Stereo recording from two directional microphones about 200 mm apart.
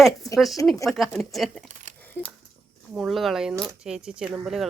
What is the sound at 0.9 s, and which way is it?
Speech, centre (ahead or behind).